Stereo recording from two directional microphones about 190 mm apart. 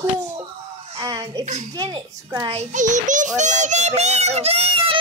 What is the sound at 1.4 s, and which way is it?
Speech, 35° right (ahead or behind).